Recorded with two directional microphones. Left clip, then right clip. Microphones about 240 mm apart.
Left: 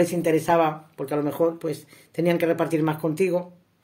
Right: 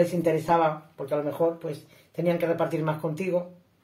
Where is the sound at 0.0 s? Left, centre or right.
Left.